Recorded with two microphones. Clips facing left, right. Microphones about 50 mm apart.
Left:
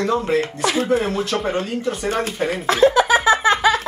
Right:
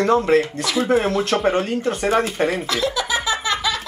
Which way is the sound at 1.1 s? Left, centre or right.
Right.